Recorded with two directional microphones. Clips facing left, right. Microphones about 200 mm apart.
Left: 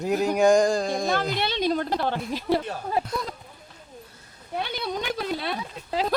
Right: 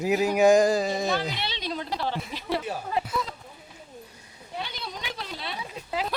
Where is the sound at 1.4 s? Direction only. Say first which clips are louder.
Left 8 dB; 50° left (ahead or behind).